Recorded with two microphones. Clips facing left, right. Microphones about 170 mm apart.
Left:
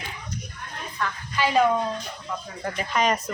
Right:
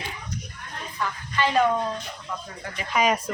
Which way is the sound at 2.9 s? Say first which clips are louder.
Right 1 dB; 10° right (ahead or behind).